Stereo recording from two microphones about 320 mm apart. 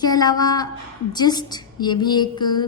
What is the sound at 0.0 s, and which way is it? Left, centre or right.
A woman's voice, centre.